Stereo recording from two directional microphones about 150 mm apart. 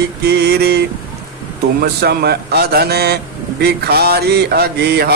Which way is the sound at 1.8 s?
90° right.